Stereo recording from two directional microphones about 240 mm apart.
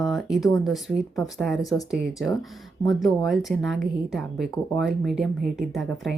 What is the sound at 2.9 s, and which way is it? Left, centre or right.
A woman's voice, centre.